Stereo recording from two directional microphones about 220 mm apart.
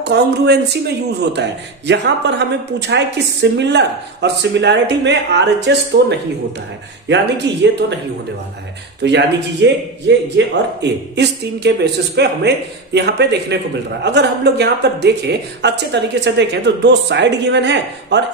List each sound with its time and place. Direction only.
0.0 s speech: 50° right (ahead or behind)
7.5 s speech: 50° right (ahead or behind)
9.0 s speech: 50° right (ahead or behind)